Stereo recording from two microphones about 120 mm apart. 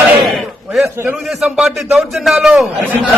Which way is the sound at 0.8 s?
20° right (ahead or behind).